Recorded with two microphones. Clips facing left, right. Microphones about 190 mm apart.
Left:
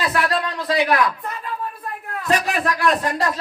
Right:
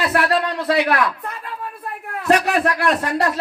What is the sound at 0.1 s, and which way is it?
Speech, 60° right (ahead or behind).